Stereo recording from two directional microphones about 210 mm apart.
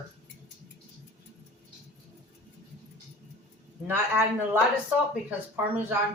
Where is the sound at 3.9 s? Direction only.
10° right (ahead or behind).